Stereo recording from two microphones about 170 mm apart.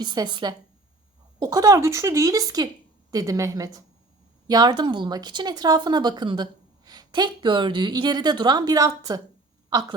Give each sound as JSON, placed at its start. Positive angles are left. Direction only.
{"t": 0.0, "sound": "speech", "side_deg": -25}